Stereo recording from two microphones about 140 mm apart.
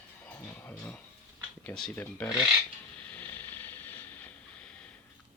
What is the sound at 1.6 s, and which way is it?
Speech, 5° left (ahead or behind).